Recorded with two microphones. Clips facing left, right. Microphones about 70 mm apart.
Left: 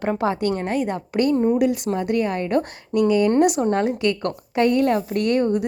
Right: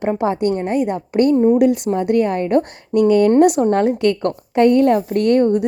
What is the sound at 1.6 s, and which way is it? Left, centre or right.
A woman's voice, right.